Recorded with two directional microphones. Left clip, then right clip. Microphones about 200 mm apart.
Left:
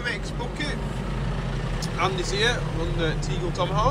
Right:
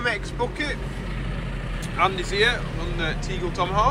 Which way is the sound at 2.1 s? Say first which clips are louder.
Right 2 dB; 20° left (ahead or behind).